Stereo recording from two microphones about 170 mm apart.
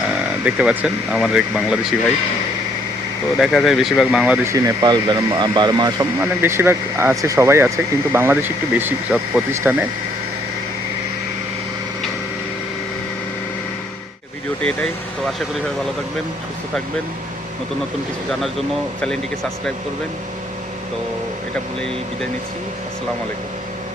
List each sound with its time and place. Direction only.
0.4 s speech: 10° right (ahead or behind)
3.3 s speech: centre (ahead or behind)
4.5 s speech: 20° right (ahead or behind)
6.4 s speech: 15° right (ahead or behind)